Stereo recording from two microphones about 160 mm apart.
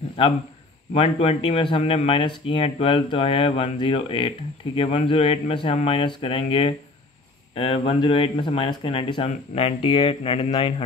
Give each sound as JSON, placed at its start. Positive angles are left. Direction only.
{"t": 0.9, "sound": "speech", "side_deg": 35}